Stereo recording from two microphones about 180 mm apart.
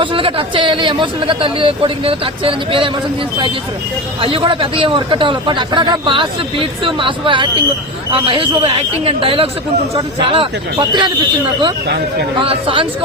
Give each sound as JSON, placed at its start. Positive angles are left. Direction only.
{"t": 0.0, "sound": "speech", "side_deg": -30}
{"t": 4.2, "sound": "speech", "side_deg": -30}